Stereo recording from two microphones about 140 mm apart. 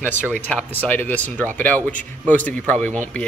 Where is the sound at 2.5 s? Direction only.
10° left (ahead or behind).